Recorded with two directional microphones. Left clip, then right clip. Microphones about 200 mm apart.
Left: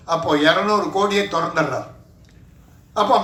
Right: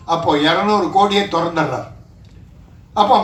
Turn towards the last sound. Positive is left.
turn(degrees=55)  # may be behind; listen again after turning